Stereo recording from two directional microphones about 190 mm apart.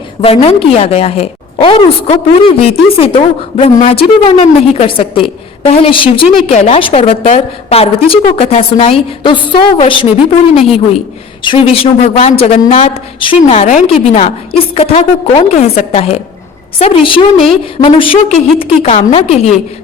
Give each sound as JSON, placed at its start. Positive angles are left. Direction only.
{"t": 0.2, "sound": "a woman's voice", "side_deg": 30}
{"t": 11.4, "sound": "a woman's voice", "side_deg": 30}